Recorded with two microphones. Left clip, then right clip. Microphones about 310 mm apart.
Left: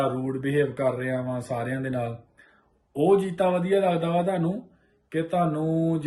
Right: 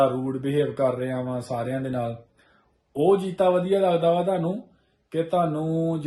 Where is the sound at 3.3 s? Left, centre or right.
Centre.